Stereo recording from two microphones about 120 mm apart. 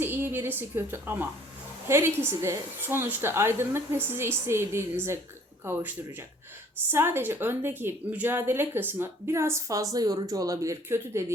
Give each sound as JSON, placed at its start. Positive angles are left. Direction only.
{"t": 0.0, "sound": "a woman's voice", "side_deg": -20}